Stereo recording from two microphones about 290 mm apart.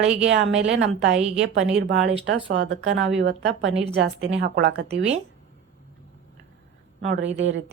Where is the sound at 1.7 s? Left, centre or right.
Right.